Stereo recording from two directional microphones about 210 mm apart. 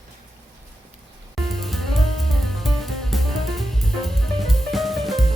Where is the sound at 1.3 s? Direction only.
Centre (ahead or behind).